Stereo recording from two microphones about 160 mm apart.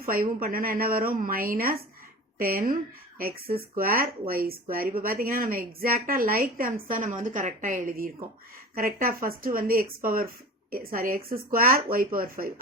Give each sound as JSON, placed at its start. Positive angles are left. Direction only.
{"t": 0.1, "sound": "speech", "side_deg": -65}